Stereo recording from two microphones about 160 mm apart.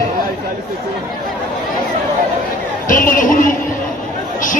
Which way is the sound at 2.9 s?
55° left (ahead or behind).